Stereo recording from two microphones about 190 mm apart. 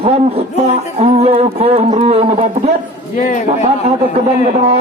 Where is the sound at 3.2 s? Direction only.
45° left (ahead or behind).